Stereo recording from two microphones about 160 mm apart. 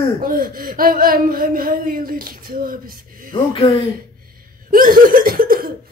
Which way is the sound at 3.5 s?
40° left (ahead or behind).